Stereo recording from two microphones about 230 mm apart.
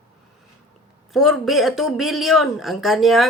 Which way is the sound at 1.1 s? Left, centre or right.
Centre.